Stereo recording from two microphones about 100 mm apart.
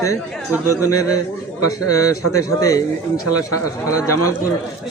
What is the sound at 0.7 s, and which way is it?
A man's voice, 35° left (ahead or behind).